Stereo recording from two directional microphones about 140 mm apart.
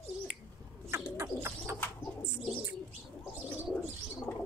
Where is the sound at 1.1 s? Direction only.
20° right (ahead or behind).